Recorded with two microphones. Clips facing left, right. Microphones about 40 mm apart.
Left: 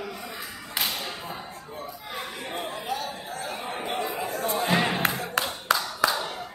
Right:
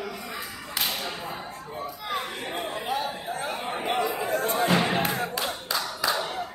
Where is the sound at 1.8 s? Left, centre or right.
Right.